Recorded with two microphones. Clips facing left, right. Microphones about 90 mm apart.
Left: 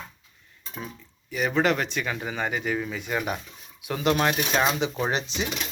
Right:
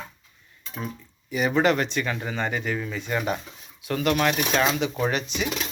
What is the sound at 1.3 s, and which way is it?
Speech, centre (ahead or behind).